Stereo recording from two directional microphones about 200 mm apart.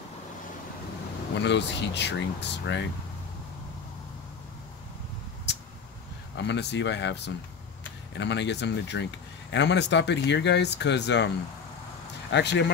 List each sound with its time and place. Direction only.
1.4 s speech: 60° left (ahead or behind)
6.3 s speech: 60° left (ahead or behind)
12.3 s speech: 60° left (ahead or behind)